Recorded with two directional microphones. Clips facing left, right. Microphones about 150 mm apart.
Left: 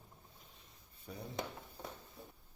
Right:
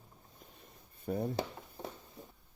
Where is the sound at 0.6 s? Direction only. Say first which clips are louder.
Right 6 dB; 55° right (ahead or behind).